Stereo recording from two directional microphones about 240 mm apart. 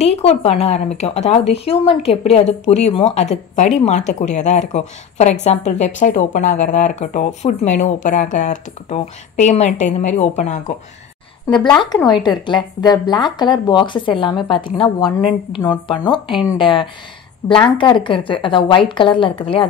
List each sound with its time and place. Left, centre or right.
0.0 s speech: left
11.8 s speech: centre